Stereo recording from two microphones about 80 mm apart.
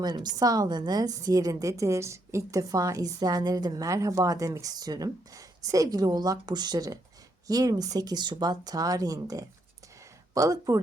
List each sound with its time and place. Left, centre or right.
0.0 s a woman's voice: right